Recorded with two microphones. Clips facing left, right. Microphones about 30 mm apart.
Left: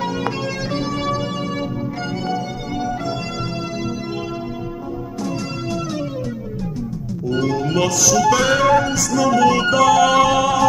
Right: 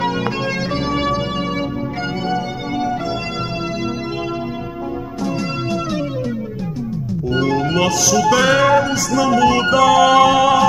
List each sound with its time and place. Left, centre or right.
0.9 s music: centre
2.2 s organ: centre
7.2 s music: centre
8.5 s music: right
8.7 s music: centre